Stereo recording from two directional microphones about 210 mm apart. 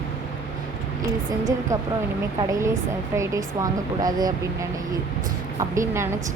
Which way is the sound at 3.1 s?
15° right (ahead or behind).